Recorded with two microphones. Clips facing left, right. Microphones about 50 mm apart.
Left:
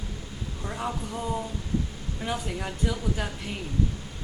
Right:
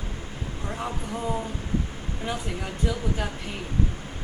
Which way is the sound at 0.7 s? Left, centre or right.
Centre.